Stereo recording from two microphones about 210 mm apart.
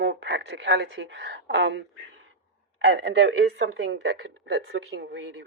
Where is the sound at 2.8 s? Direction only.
55° right (ahead or behind).